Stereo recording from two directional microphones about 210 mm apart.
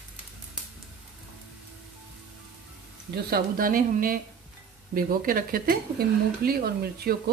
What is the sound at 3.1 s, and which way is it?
Speech, 45° right (ahead or behind).